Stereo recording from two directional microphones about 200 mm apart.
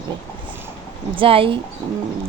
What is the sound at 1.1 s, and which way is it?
Speech, 25° right (ahead or behind).